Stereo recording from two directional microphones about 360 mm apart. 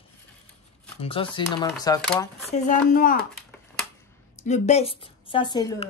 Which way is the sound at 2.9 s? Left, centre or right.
Left.